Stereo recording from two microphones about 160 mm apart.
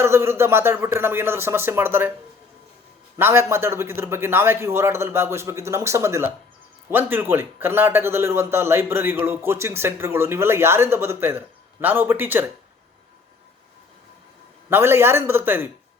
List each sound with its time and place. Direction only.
0.0 s a man's voice: 15° right (ahead or behind)
3.2 s a man's voice: 15° right (ahead or behind)
14.7 s a man's voice: 15° right (ahead or behind)